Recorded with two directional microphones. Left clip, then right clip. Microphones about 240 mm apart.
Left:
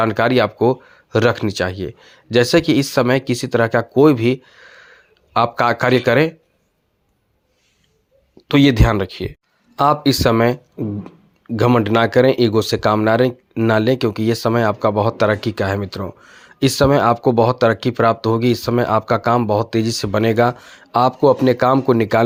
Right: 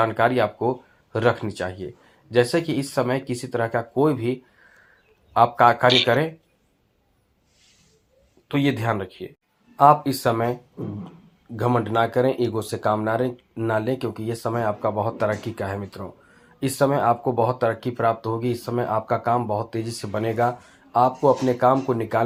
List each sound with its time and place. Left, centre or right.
0.0 s speech: left
8.4 s speech: left
11.7 s speech: left